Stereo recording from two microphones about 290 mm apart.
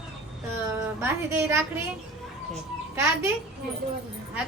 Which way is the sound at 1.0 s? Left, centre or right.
Centre.